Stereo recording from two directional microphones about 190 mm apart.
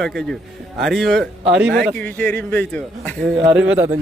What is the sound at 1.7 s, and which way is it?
Speech, 55° right (ahead or behind).